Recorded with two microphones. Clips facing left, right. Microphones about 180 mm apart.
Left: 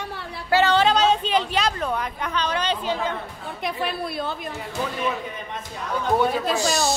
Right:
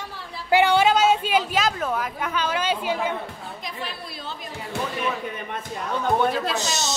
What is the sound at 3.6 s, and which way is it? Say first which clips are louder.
Speech: left 10 dB; 60° left (ahead or behind).